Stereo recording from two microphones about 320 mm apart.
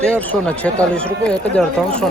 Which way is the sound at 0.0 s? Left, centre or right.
Centre.